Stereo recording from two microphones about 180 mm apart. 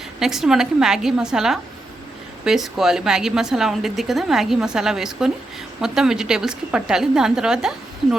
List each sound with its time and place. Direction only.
0.2 s a woman's voice: centre (ahead or behind)